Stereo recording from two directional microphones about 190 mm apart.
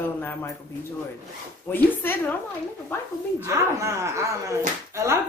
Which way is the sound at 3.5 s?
15° right (ahead or behind).